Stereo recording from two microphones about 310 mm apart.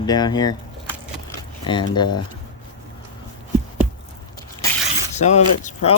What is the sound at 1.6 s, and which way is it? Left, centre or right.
Speech, centre.